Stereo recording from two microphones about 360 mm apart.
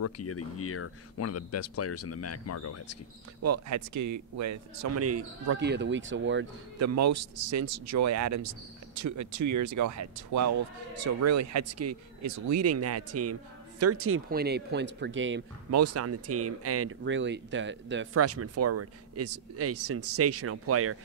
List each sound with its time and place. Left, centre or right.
0.0 s speech: left
3.4 s speech: right
5.6 s speech: right
6.8 s speech: right
15.7 s speech: right